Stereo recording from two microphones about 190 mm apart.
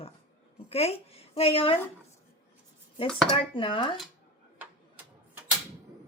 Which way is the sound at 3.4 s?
25° left (ahead or behind).